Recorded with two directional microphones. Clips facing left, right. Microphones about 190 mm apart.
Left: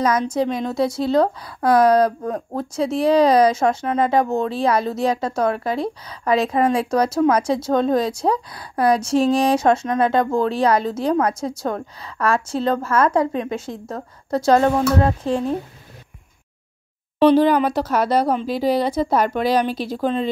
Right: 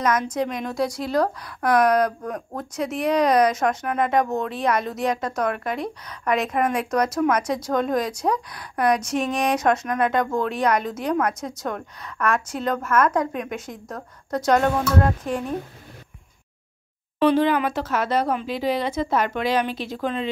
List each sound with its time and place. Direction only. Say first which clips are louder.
0.0 s a woman's voice: left 4 dB; 30° left (ahead or behind)
17.2 s speech: left 5 dB; 35° left (ahead or behind)